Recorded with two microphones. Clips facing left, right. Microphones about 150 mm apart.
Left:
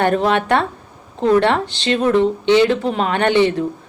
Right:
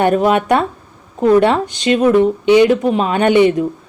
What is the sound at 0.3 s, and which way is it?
Speech, 15° right (ahead or behind).